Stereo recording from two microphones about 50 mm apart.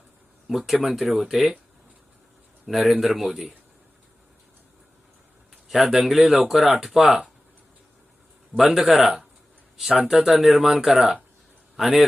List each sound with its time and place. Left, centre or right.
0.4 s speech: centre
2.7 s speech: centre
5.6 s a man's voice: centre
8.7 s speech: centre